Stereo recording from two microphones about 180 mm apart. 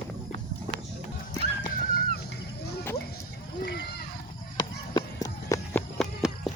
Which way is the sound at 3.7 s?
65° left (ahead or behind).